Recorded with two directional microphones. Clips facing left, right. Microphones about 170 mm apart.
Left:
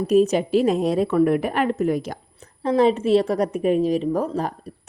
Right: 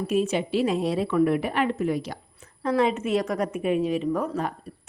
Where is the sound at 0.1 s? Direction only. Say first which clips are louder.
Left 8 dB; 40° left (ahead or behind).